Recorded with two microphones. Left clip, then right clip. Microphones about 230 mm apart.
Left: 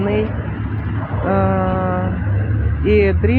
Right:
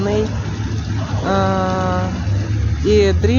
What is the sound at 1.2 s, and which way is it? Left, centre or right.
Speech, centre.